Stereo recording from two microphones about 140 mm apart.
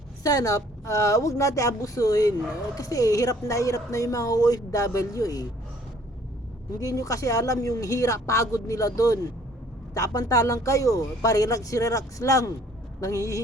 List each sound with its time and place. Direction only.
0.2 s a woman's voice: 25° left (ahead or behind)
6.7 s a woman's voice: 25° left (ahead or behind)